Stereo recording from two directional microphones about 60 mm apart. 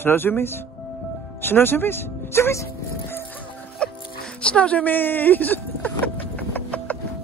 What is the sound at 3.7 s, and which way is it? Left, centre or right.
Music, centre.